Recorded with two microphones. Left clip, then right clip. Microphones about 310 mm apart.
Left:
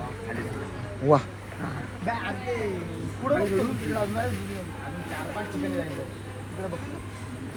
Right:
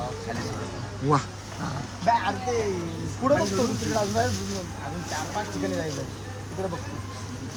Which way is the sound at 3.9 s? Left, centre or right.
Right.